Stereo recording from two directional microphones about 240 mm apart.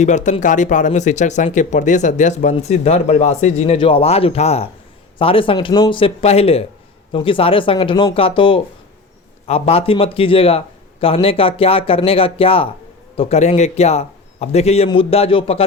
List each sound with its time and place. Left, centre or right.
0.0 s speech: left